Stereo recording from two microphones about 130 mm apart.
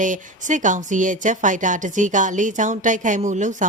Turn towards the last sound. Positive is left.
turn(degrees=-70)  # may be behind; listen again after turning